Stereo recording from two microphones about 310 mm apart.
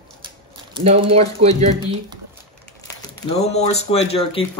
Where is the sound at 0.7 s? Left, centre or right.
Centre.